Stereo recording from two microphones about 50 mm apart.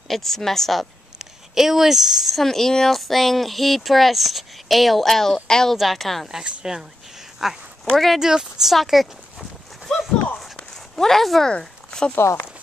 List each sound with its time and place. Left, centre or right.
0.1 s speech: centre
1.1 s speech: centre
6.4 s speech: centre
8.2 s livestock: centre
10.7 s a sound: centre
11.4 s speech: centre
12.2 s speech: left